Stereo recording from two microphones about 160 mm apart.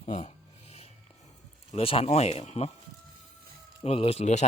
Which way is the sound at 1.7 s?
35° left (ahead or behind).